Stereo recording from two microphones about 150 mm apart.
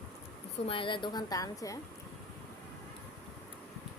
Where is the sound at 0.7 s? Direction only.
35° left (ahead or behind).